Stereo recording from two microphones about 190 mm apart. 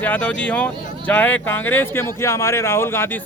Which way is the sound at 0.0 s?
10° left (ahead or behind).